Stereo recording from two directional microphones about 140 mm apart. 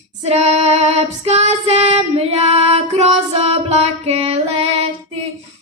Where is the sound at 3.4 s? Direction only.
50° right (ahead or behind).